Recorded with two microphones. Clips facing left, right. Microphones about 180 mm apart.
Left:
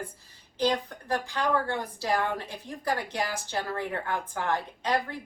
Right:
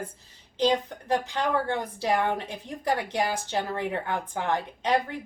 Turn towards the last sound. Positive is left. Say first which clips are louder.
# right 3 dB
turn(degrees=-20)  # may be behind; listen again after turning